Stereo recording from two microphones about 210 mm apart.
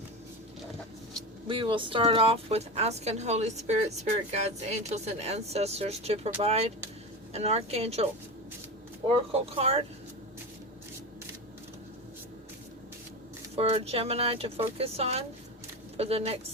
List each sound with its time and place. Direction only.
1.5 s speech: 25° right (ahead or behind)
9.3 s speech: 25° right (ahead or behind)
13.6 s speech: 30° right (ahead or behind)